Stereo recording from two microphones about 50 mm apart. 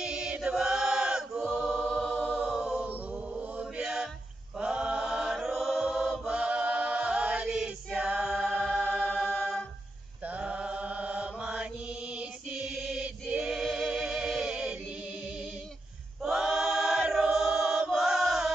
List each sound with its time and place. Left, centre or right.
0.0 s chant: centre
1.5 s choir: centre
2.4 s a capella: centre
2.8 s mantra: right
4.6 s chant: centre
5.0 s chant: centre
6.2 s chant: right
7.5 s choir: centre
10.2 s mantra: right
13.6 s music: centre
14.5 s music: centre
16.2 s choir: centre
17.9 s chant: centre